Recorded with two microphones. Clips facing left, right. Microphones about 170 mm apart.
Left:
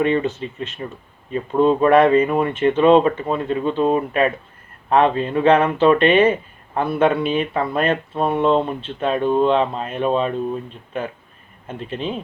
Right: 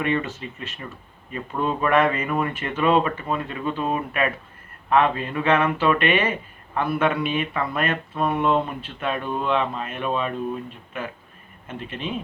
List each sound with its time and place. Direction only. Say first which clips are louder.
0.0 s speech: left 6 dB; 30° left (ahead or behind)